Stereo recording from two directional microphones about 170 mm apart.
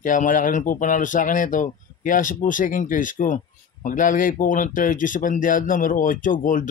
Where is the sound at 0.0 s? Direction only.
50° left (ahead or behind).